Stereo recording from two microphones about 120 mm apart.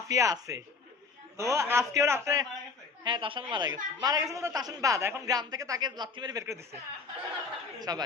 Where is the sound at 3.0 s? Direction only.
45° right (ahead or behind); by 6.7 s 25° right (ahead or behind).